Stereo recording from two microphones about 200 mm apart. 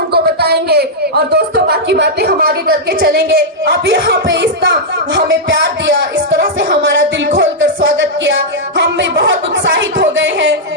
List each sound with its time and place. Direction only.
0.1 s speech: 55° right (ahead or behind)